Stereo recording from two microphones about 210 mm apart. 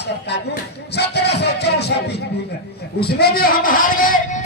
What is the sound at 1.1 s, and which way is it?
A man's voice, 50° left (ahead or behind).